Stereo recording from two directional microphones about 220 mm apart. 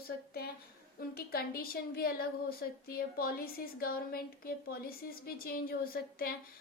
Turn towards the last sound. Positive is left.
turn(degrees=45)  # may be behind; listen again after turning